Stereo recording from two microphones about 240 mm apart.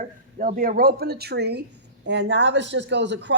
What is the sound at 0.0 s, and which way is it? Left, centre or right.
Speech, right.